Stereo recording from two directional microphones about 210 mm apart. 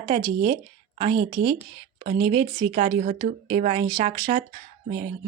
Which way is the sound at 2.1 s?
25° right (ahead or behind).